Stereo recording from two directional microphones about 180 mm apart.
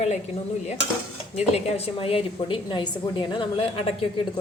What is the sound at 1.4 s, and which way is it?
A woman's voice, 35° left (ahead or behind).